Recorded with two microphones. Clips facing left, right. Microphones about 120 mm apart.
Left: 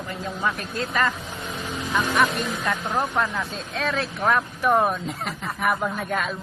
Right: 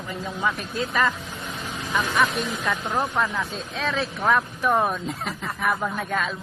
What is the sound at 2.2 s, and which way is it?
Speech, centre (ahead or behind).